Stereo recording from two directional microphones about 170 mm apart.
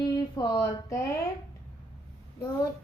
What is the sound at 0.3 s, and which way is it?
Speech, 20° left (ahead or behind).